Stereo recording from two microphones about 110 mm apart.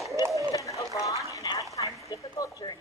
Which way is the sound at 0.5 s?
30° left (ahead or behind).